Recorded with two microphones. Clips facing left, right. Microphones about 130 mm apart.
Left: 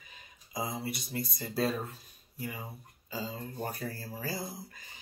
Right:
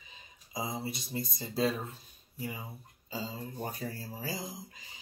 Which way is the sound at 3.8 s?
20° right (ahead or behind).